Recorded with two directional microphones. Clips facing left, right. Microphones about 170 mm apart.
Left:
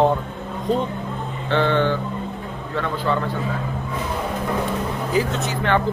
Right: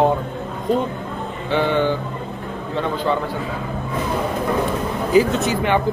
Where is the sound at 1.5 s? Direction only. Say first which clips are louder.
Right 1 dB; 10° right (ahead or behind).